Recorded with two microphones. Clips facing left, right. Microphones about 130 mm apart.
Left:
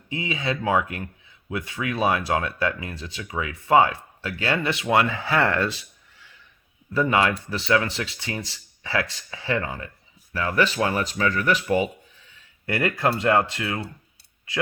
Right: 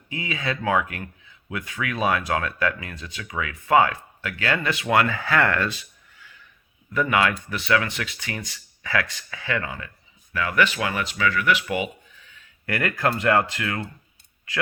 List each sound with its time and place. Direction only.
0.1 s speech: 20° left (ahead or behind)
6.9 s speech: 25° left (ahead or behind)